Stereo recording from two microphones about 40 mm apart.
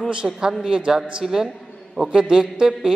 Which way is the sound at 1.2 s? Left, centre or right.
Centre.